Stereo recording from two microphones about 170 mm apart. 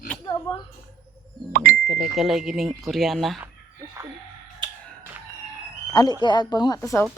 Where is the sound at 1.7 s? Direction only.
Centre (ahead or behind).